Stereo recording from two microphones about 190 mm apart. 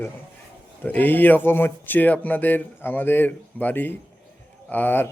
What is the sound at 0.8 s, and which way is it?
Speech, 10° left (ahead or behind).